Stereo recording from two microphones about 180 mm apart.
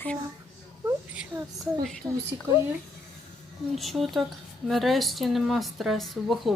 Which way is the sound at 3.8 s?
Centre (ahead or behind).